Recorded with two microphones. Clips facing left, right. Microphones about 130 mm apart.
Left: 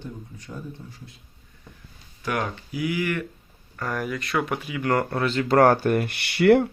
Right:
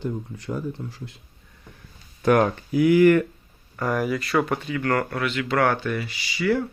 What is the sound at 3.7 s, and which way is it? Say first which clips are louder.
Speech: right 5 dB; 15° right (ahead or behind).